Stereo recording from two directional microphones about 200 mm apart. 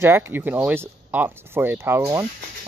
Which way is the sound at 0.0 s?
10° right (ahead or behind).